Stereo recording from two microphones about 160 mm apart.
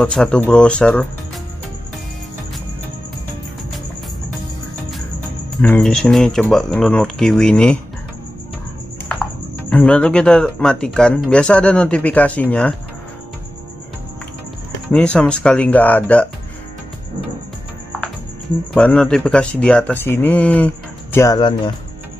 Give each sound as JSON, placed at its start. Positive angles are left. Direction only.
{"t": 0.0, "sound": "speech", "side_deg": 5}
{"t": 5.6, "sound": "speech", "side_deg": 5}
{"t": 9.1, "sound": "speech", "side_deg": 5}
{"t": 14.9, "sound": "speech", "side_deg": 5}
{"t": 18.8, "sound": "speech", "side_deg": 5}
{"t": 21.4, "sound": "speech", "side_deg": 30}